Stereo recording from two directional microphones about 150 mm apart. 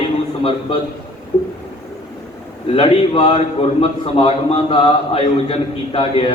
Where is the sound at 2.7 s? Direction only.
40° left (ahead or behind).